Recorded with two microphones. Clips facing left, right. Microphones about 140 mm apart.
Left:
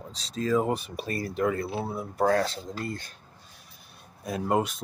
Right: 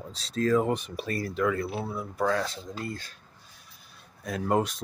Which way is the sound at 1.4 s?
30° left (ahead or behind).